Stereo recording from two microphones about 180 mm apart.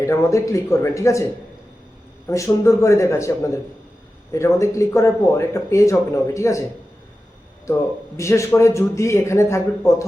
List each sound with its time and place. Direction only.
0.0 s speech: 15° left (ahead or behind)
2.2 s speech: 15° left (ahead or behind)
7.7 s speech: 15° left (ahead or behind)